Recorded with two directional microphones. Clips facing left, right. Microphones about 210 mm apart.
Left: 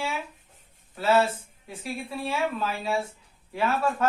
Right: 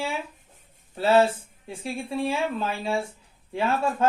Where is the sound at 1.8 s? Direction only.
25° right (ahead or behind).